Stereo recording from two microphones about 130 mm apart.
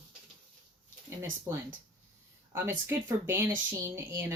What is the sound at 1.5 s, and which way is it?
Speech, 20° right (ahead or behind).